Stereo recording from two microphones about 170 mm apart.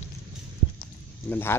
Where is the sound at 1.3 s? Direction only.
15° left (ahead or behind).